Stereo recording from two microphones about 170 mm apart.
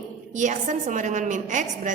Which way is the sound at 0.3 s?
45° right (ahead or behind).